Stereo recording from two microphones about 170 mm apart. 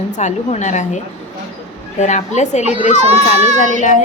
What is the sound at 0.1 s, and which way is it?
A woman's voice, 45° left (ahead or behind).